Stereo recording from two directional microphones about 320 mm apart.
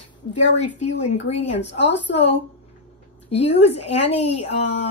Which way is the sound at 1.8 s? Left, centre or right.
Left.